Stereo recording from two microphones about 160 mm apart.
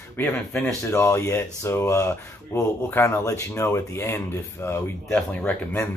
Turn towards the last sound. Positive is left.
turn(degrees=10)  # may be behind; listen again after turning